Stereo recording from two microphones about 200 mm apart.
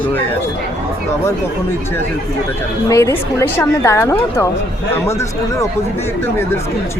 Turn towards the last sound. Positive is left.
turn(degrees=10)  # may be behind; listen again after turning